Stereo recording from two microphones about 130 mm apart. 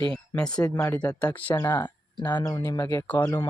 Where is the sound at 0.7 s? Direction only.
15° left (ahead or behind).